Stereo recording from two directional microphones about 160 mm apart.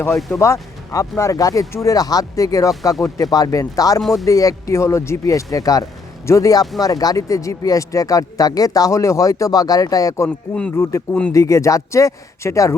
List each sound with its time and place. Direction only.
0.1 s speech: centre (ahead or behind)
0.3 s speech: 20° left (ahead or behind)
4.0 s speech: centre (ahead or behind)
4.3 s speech: 20° left (ahead or behind)
10.2 s music: 5° left (ahead or behind)
11.3 s speech: 20° left (ahead or behind)